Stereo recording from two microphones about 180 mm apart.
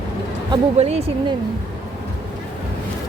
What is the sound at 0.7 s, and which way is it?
Speech, 35° right (ahead or behind).